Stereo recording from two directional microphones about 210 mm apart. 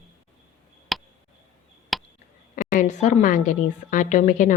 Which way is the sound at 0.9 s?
Centre (ahead or behind).